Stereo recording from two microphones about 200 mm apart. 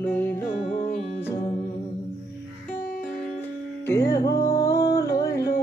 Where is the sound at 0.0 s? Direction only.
10° left (ahead or behind).